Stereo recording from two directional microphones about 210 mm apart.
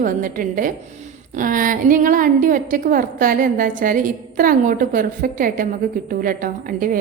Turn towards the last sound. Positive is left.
turn(degrees=-40)  # may be behind; listen again after turning